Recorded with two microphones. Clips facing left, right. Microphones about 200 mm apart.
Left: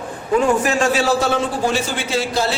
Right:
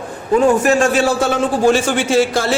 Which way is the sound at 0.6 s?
50° right (ahead or behind).